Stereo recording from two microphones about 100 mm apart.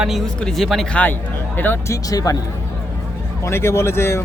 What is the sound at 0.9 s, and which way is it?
A man's voice, 15° left (ahead or behind).